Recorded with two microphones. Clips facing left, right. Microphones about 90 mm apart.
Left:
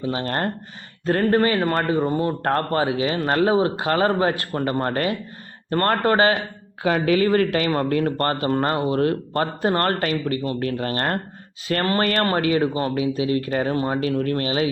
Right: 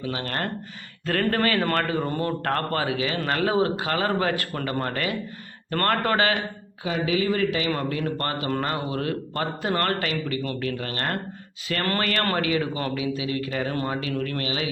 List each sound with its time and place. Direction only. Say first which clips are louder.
0.0 s speech: left 5 dB; 30° left (ahead or behind)
6.8 s speech: left 5 dB; 60° left (ahead or behind); by 14.7 s 35° left (ahead or behind)